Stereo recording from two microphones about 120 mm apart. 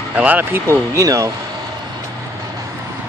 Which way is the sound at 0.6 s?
25° right (ahead or behind).